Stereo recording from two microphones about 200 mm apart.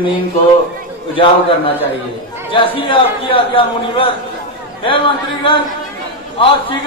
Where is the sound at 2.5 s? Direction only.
25° left (ahead or behind).